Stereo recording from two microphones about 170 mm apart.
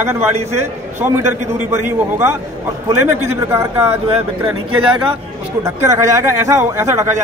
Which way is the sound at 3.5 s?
15° right (ahead or behind).